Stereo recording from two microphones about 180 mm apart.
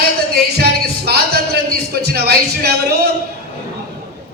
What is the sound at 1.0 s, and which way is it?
A man's voice, 60° right (ahead or behind).